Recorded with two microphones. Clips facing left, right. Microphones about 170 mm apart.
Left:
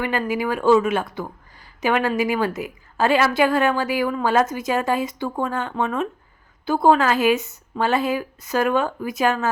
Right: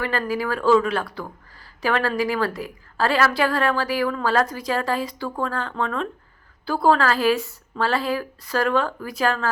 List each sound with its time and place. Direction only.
0.0 s a woman's voice: 20° left (ahead or behind)